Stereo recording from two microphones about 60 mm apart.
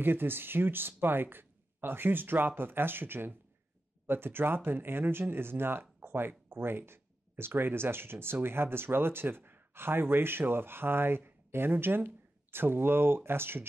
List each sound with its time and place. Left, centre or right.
0.0 s speech: right